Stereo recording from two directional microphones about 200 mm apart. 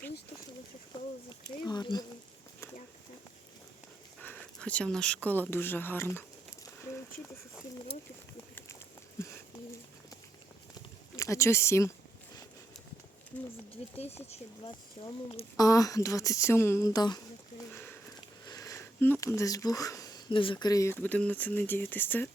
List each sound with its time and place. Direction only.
1.5 s speech: 20° left (ahead or behind)
4.2 s speech: 5° left (ahead or behind)
9.2 s a sound: 15° left (ahead or behind)
11.2 s speech: 15° left (ahead or behind)
13.8 s speech: 35° left (ahead or behind)
15.0 s speech: 25° left (ahead or behind)
17.7 s a sound: 10° left (ahead or behind)
18.4 s speech: 20° left (ahead or behind)